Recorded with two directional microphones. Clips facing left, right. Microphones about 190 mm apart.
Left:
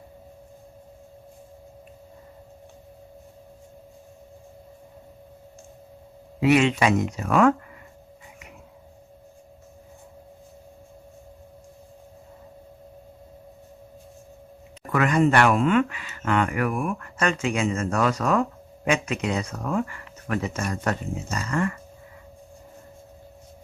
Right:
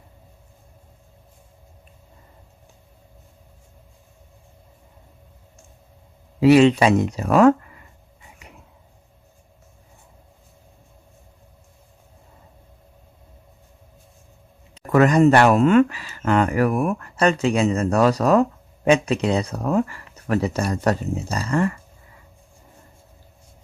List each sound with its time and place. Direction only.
6.4 s speech: 35° right (ahead or behind)
14.8 s speech: 40° right (ahead or behind)